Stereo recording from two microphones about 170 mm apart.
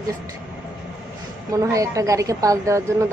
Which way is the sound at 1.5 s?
20° right (ahead or behind).